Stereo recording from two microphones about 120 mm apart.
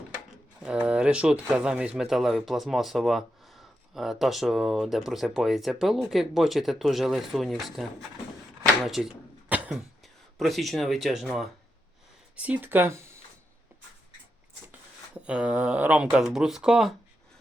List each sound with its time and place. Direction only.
0.6 s speech: 10° right (ahead or behind)
8.8 s a sound: 5° right (ahead or behind)
10.3 s speech: centre (ahead or behind)
12.4 s speech: 15° right (ahead or behind)
14.7 s speech: 10° right (ahead or behind)